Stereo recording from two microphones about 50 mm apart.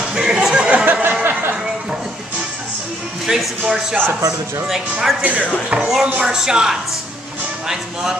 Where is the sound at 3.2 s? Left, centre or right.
Centre.